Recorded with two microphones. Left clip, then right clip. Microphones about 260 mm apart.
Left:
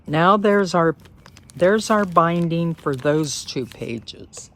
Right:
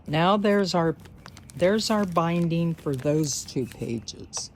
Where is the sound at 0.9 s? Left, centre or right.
Centre.